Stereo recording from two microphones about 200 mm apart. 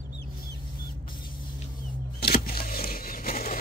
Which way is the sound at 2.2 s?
50° left (ahead or behind).